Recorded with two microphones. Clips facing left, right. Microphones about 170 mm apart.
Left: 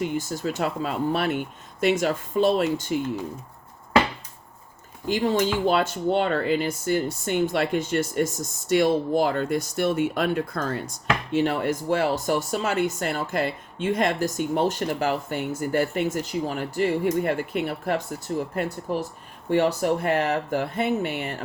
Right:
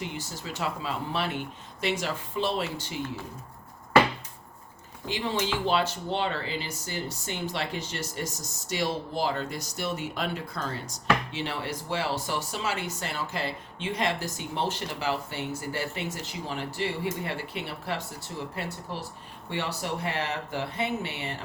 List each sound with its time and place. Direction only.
0.0 s speech: 50° left (ahead or behind)
5.0 s speech: 45° left (ahead or behind)